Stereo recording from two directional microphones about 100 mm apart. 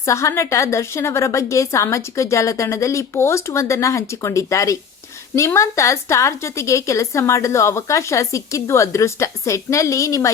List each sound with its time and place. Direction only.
0.0 s a woman's voice: 30° left (ahead or behind)